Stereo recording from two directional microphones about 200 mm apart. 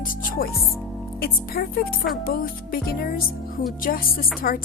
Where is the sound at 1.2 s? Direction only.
50° left (ahead or behind).